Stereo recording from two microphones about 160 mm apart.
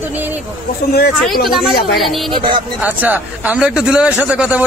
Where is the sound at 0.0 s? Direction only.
10° right (ahead or behind).